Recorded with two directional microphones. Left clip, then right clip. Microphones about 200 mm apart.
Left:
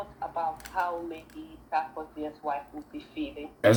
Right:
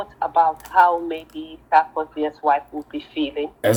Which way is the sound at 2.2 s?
50° right (ahead or behind).